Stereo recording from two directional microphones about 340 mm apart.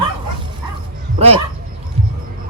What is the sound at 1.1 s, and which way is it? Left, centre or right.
Speech, centre.